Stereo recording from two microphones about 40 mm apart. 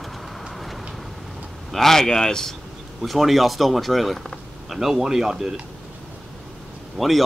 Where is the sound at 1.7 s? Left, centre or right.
Centre.